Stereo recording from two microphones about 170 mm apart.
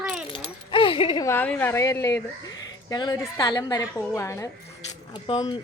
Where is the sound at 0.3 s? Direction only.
30° left (ahead or behind).